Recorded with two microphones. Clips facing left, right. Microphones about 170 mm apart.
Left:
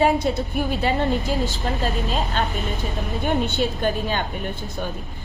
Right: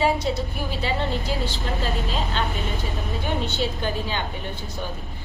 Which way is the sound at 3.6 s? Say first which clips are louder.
Left 3 dB; 50° left (ahead or behind).